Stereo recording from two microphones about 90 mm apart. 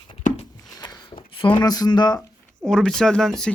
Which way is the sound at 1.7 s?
45° left (ahead or behind).